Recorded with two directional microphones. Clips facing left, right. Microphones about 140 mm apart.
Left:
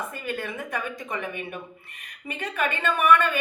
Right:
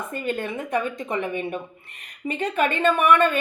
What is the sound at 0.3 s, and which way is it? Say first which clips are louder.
A woman's voice: right 6 dB; 25° right (ahead or behind).